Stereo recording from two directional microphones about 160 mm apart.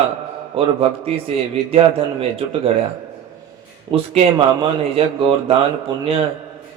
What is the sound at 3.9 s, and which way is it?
A man's voice, 35° right (ahead or behind).